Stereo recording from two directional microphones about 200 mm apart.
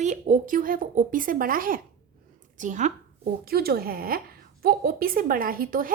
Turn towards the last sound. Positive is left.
turn(degrees=-45)  # may be behind; listen again after turning